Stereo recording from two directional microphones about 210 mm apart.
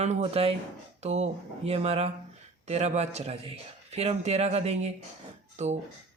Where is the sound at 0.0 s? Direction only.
30° right (ahead or behind).